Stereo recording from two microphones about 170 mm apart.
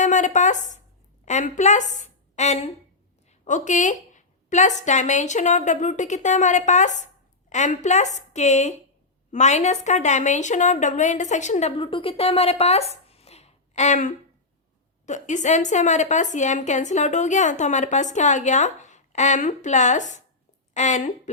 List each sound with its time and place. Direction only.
0.0 s a woman's voice: 45° left (ahead or behind)
11.8 s a woman's voice: 30° left (ahead or behind)
12.9 s a sound: 35° left (ahead or behind)
15.0 s a woman's voice: 45° left (ahead or behind)